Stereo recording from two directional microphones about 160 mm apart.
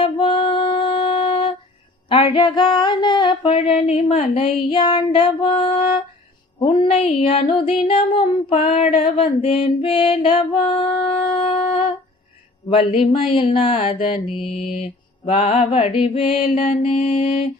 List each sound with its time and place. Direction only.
0.0 s music: 35° left (ahead or behind)
2.0 s mantra: 35° left (ahead or behind)
11.1 s shofar: 35° left (ahead or behind)
12.6 s mantra: 35° left (ahead or behind)